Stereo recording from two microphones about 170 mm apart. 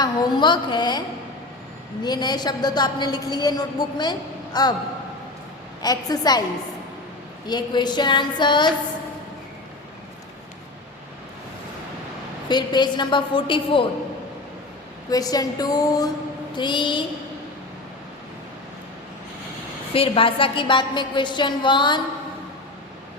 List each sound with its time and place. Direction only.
0.0 s a woman's voice: 25° left (ahead or behind)
2.0 s a woman's voice: 25° left (ahead or behind)
5.8 s a woman's voice: 20° left (ahead or behind)
7.4 s a woman's voice: 25° left (ahead or behind)
12.5 s a woman's voice: 25° left (ahead or behind)
15.1 s a woman's voice: 20° left (ahead or behind)
19.9 s a woman's voice: 35° left (ahead or behind)